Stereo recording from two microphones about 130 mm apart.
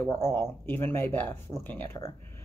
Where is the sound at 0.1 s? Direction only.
20° left (ahead or behind).